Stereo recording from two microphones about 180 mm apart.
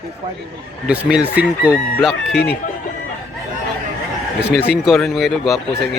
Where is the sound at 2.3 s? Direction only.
60° left (ahead or behind).